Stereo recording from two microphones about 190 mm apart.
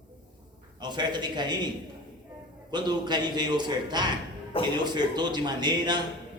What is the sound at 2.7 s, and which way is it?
A man's voice, 20° right (ahead or behind).